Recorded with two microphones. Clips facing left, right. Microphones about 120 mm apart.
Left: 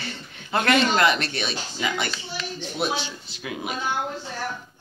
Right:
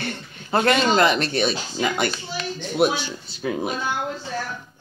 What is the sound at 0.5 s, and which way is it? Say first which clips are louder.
A child's voice: right 2 dB; 35° right (ahead or behind).